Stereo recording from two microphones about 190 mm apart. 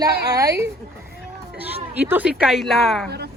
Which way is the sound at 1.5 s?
10° right (ahead or behind).